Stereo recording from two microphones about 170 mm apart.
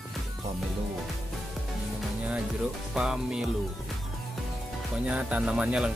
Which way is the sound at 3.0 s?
5° right (ahead or behind).